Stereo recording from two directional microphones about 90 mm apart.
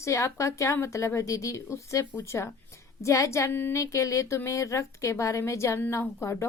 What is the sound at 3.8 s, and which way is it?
A woman's voice, 35° left (ahead or behind).